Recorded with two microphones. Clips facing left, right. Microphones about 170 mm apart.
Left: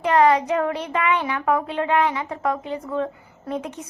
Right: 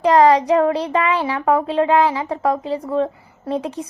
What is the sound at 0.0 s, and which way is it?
A child's voice, 35° right (ahead or behind).